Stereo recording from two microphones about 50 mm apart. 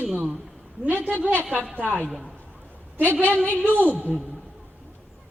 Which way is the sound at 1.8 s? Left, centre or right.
Right.